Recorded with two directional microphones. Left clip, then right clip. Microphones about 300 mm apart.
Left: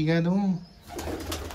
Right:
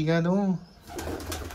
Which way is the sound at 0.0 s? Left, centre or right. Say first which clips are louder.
Right 1 dB; centre.